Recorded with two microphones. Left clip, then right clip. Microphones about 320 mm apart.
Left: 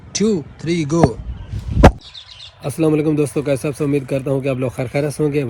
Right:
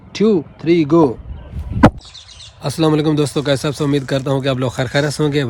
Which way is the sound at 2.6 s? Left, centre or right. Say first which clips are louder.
Right 1 dB; centre.